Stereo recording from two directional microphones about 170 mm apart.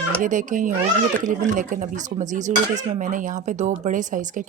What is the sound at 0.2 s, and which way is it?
Speech, 50° right (ahead or behind).